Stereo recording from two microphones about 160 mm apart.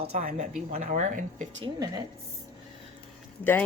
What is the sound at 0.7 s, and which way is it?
Speech, 55° right (ahead or behind).